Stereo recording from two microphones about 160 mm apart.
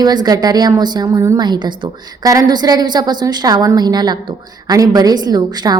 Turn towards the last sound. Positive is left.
turn(degrees=-25)  # may be behind; listen again after turning